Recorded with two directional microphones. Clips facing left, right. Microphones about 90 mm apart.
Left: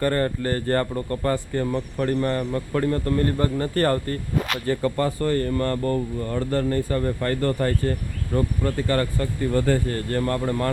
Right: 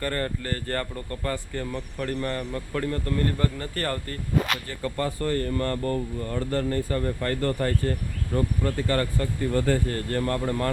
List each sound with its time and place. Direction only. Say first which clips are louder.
0.0 s speech: left 6 dB; 35° left (ahead or behind)